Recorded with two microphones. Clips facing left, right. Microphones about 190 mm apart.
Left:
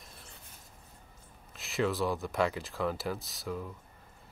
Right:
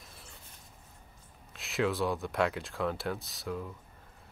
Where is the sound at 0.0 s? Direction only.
Centre (ahead or behind).